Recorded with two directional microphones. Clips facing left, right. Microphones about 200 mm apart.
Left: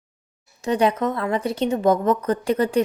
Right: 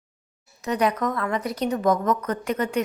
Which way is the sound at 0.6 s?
30° left (ahead or behind).